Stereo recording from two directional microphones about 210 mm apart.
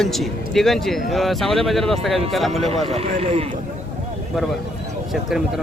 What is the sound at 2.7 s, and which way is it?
Speech, 30° right (ahead or behind).